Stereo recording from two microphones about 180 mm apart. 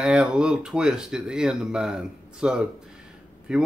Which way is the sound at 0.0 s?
5° right (ahead or behind).